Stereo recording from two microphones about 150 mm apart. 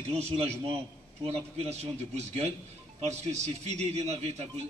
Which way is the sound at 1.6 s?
45° right (ahead or behind).